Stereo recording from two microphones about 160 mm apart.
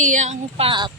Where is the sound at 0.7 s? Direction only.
30° right (ahead or behind).